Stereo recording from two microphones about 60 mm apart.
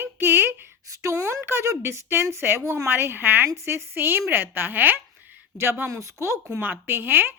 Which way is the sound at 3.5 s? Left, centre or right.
Right.